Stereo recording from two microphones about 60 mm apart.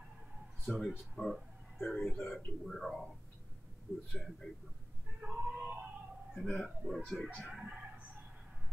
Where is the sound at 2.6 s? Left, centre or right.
Centre.